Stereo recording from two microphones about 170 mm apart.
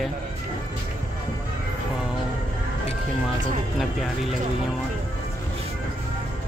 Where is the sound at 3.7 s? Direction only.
Centre (ahead or behind).